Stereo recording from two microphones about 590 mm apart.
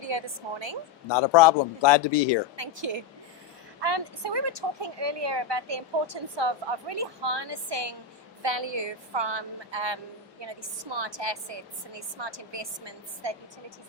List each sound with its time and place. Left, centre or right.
0.0 s speech: right
1.1 s speech: left
2.6 s speech: right